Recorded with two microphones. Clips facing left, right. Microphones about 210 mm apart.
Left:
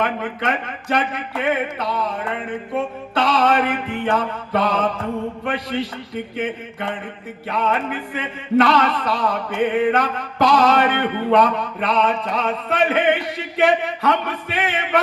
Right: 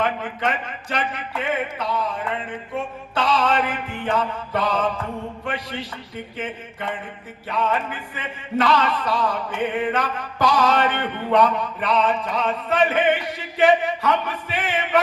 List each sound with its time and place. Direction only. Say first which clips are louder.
0.0 s speech: left 1 dB; 60° left (ahead or behind)
6.3 s speech: left 5 dB; 60° left (ahead or behind)